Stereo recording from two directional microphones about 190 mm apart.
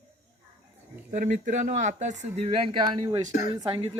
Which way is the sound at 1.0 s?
45° right (ahead or behind).